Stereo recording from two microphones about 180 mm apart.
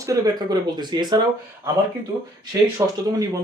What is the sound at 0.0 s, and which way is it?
Speech, 20° right (ahead or behind).